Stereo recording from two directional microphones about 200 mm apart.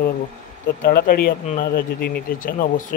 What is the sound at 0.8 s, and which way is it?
Speech, 45° left (ahead or behind).